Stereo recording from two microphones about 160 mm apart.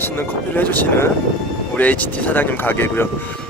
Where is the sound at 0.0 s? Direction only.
10° left (ahead or behind).